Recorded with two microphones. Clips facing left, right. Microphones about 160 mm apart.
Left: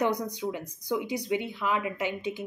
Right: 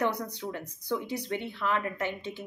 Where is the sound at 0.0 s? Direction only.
15° left (ahead or behind).